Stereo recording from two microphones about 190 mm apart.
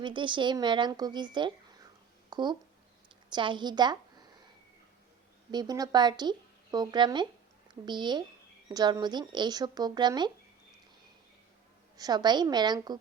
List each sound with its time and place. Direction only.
0.0 s speech: 25° right (ahead or behind)
5.5 s speech: 20° right (ahead or behind)
11.9 s speech: 20° right (ahead or behind)